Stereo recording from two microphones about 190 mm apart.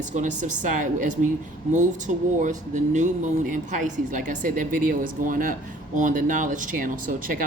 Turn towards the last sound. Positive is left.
turn(degrees=-45)  # may be behind; listen again after turning